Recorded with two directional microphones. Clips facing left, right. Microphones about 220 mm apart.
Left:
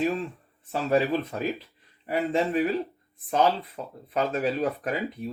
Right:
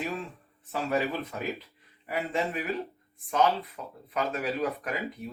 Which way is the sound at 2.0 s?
30° left (ahead or behind).